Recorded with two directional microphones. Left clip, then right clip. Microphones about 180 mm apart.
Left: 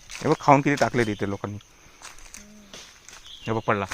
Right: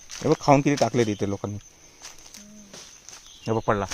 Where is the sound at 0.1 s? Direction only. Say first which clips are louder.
Right 1 dB; 30° left (ahead or behind).